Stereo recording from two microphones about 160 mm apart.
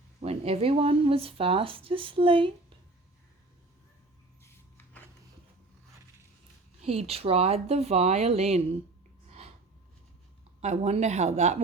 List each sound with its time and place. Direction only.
0.2 s speech: 40° right (ahead or behind)
6.8 s speech: 40° right (ahead or behind)
10.6 s speech: 45° right (ahead or behind)